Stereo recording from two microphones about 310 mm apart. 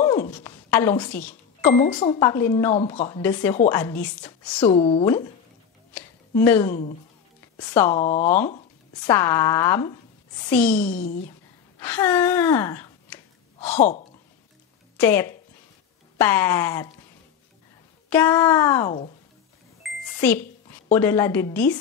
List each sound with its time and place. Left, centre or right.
0.0 s a sound: centre
2.0 s speech: centre
3.2 s speech: centre
4.6 s speech: centre
6.4 s speech: centre
7.9 s speech: left
9.0 s speech: centre
10.8 s speech: left
11.8 s speech: centre
13.7 s speech: left
15.0 s speech: centre
18.1 s speech: centre
19.8 s a sound: centre
20.9 s speech: centre